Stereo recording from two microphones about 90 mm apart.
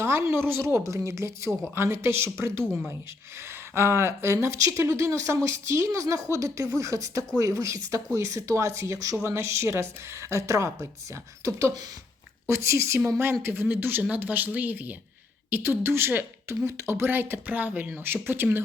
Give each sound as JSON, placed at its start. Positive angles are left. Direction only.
{"t": 0.0, "sound": "speech", "side_deg": -30}